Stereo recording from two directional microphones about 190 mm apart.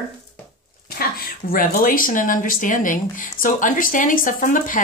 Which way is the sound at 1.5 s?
50° left (ahead or behind).